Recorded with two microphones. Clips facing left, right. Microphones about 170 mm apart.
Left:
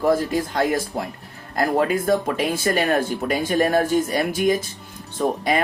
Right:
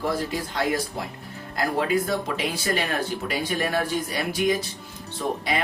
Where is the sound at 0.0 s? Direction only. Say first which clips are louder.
Left 7 dB; 50° left (ahead or behind).